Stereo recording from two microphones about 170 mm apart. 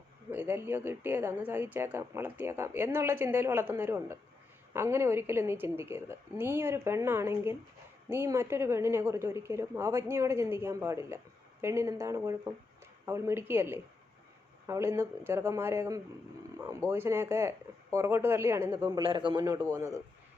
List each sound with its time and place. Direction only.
0.3 s speech: 10° right (ahead or behind)
19.0 s a man's voice: 30° right (ahead or behind)